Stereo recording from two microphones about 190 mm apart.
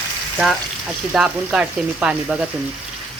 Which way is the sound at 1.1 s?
5° right (ahead or behind).